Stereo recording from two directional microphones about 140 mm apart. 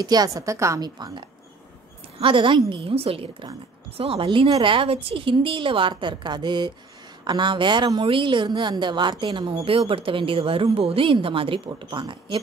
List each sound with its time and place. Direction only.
0.0 s a woman's voice: 30° right (ahead or behind)